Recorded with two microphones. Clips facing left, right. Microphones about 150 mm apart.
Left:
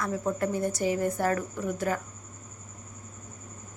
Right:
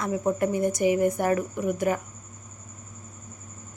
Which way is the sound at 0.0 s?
20° right (ahead or behind).